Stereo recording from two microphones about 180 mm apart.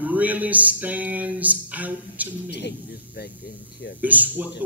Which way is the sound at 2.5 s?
65° left (ahead or behind).